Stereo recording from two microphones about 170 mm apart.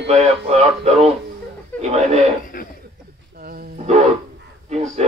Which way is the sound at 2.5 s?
55° left (ahead or behind).